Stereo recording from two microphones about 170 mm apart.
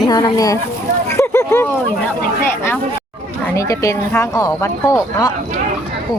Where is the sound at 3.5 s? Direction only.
20° left (ahead or behind).